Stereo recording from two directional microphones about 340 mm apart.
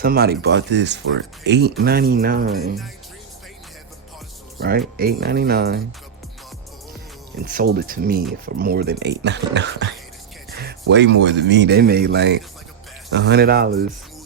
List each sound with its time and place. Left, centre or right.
0.0 s speech: right
4.9 s speech: right
7.4 s speech: right